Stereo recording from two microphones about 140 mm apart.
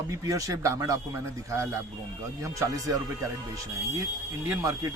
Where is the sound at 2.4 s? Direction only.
25° right (ahead or behind).